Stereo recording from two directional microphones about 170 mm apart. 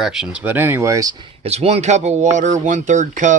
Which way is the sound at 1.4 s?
40° right (ahead or behind).